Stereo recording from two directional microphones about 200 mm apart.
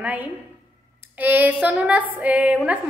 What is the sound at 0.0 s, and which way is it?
A woman's voice, 5° right (ahead or behind).